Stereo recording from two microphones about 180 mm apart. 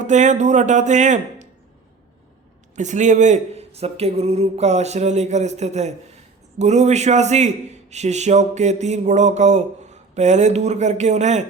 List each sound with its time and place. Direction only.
0.0 s speech: 40° right (ahead or behind)
2.7 s a man's voice: 40° right (ahead or behind)